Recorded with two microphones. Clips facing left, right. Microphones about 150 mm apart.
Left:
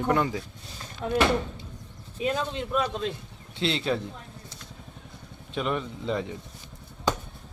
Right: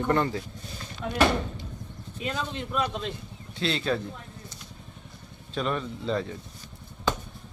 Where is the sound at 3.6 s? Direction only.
25° left (ahead or behind).